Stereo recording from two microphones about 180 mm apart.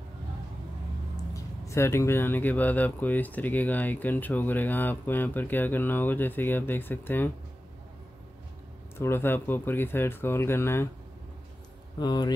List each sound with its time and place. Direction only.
1.3 s speech: 15° left (ahead or behind)
8.9 s speech: 15° left (ahead or behind)
12.0 s speech: 25° left (ahead or behind)